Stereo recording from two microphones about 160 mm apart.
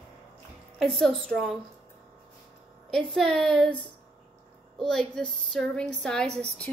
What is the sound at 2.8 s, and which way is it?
Speech, centre (ahead or behind).